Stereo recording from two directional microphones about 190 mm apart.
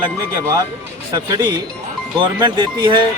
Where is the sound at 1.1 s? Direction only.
20° right (ahead or behind).